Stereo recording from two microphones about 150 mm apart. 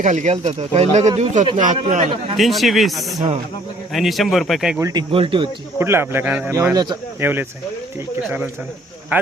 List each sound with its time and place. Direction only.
0.0 s speech: 55° right (ahead or behind)
2.3 s speech: centre (ahead or behind)
4.8 s speech: 25° right (ahead or behind)
5.1 s speech: 35° right (ahead or behind)
5.8 s speech: 15° right (ahead or behind)
6.5 s speech: 20° right (ahead or behind)
7.2 s speech: 15° right (ahead or behind)